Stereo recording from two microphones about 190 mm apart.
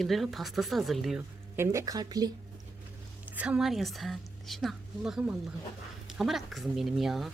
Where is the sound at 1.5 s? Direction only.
15° right (ahead or behind).